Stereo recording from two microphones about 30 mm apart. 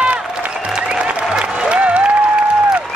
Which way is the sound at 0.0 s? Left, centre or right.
Right.